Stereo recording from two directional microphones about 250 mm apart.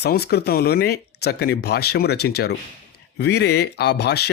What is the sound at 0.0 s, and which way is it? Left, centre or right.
Speech, left.